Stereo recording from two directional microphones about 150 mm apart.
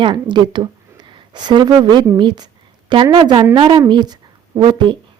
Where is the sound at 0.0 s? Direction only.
30° right (ahead or behind).